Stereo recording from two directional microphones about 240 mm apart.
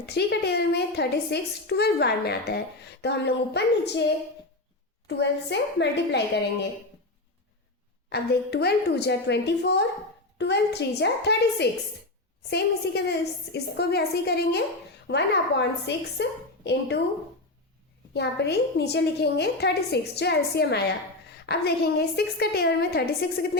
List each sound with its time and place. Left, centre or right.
0.0 s a woman's voice: left
5.0 s a woman's voice: left
8.1 s a woman's voice: left
18.1 s a woman's voice: left